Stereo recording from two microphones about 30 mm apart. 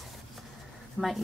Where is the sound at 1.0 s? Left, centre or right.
Right.